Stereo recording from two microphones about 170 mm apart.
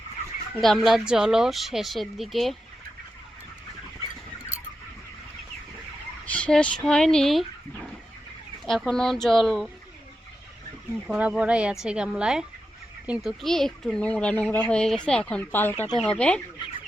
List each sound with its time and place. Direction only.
0.6 s a woman's voice: centre (ahead or behind)
6.2 s fowl: 5° left (ahead or behind)
6.8 s a woman's voice: 5° left (ahead or behind)
8.6 s a woman's voice: centre (ahead or behind)
11.1 s a woman's voice: 5° right (ahead or behind)